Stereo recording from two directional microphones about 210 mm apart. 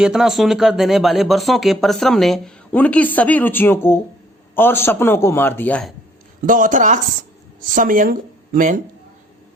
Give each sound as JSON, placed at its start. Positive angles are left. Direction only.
{"t": 0.0, "sound": "a man's voice", "side_deg": -5}
{"t": 6.4, "sound": "speech", "side_deg": -40}